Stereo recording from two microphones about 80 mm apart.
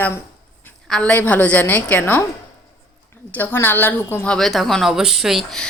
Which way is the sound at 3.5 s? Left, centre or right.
Left.